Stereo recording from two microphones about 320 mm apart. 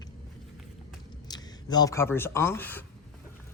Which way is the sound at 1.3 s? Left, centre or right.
Centre.